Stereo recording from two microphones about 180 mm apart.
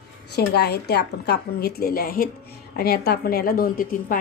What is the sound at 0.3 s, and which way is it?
A woman's voice, 65° left (ahead or behind).